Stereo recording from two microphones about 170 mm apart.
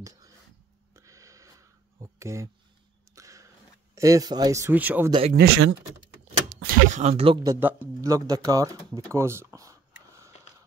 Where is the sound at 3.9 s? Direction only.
20° right (ahead or behind).